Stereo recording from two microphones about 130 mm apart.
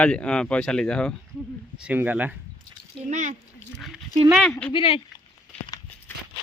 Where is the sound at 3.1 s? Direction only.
70° right (ahead or behind).